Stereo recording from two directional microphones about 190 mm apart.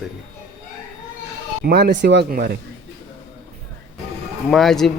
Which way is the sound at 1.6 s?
55° right (ahead or behind).